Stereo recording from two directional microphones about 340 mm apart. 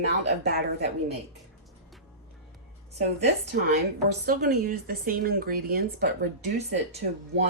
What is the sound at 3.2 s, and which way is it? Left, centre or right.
Speech, right.